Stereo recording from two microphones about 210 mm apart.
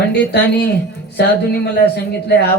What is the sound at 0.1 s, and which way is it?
Speech, 50° left (ahead or behind).